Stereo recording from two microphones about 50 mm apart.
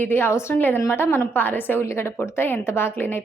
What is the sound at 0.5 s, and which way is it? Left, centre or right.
Speech, left.